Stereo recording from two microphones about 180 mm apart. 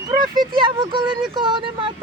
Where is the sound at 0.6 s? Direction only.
25° right (ahead or behind).